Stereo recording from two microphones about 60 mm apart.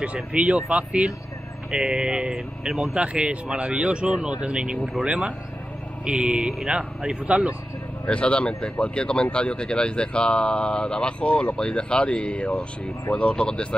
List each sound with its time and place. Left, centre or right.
0.0 s speech: right
8.1 s speech: centre